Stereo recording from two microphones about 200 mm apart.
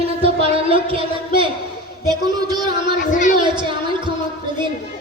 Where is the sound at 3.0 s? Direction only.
40° left (ahead or behind).